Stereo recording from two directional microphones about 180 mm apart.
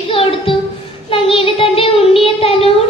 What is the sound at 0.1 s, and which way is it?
Child singing, 30° left (ahead or behind).